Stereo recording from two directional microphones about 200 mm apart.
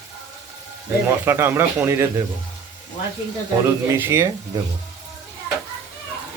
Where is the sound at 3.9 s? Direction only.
15° right (ahead or behind).